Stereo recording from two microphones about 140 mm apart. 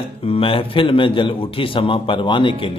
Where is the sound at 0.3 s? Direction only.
40° left (ahead or behind).